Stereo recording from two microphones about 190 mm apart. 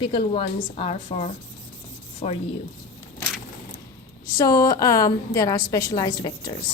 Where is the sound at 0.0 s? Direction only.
25° left (ahead or behind).